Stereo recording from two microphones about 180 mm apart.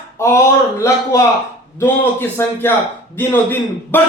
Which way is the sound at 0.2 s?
15° left (ahead or behind).